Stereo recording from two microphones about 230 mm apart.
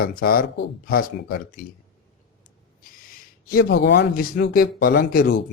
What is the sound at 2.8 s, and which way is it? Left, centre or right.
Speech, left.